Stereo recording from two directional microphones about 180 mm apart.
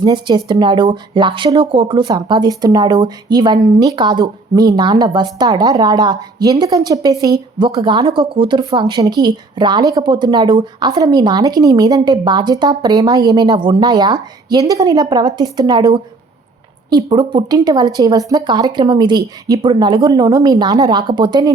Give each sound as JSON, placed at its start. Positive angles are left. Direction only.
{"t": 0.0, "sound": "speech", "side_deg": -25}